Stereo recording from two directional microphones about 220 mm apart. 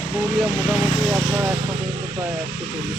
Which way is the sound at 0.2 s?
5° right (ahead or behind).